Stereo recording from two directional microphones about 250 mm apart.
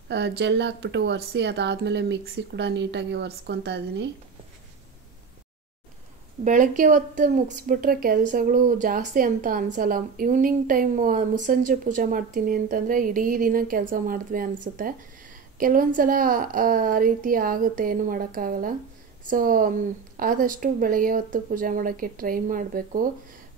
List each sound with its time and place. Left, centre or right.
0.1 s speech: right
6.4 s a woman's voice: right